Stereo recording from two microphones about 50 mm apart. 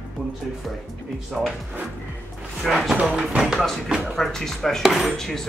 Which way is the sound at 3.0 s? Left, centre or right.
Centre.